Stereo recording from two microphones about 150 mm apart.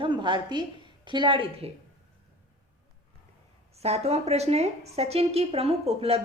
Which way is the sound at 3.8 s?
45° right (ahead or behind).